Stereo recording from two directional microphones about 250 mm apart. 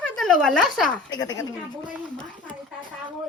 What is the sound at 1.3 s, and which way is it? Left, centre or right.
Speech, centre.